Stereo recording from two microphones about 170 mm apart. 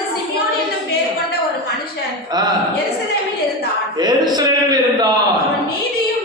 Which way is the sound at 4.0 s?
25° right (ahead or behind).